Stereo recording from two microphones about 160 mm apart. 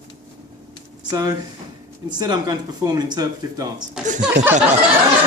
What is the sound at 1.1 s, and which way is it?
Speech, 25° right (ahead or behind).